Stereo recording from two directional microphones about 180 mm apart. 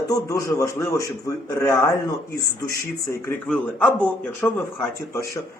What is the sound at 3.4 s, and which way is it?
Speech, 10° left (ahead or behind).